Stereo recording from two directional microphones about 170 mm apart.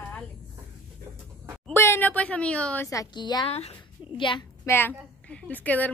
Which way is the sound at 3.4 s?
35° left (ahead or behind).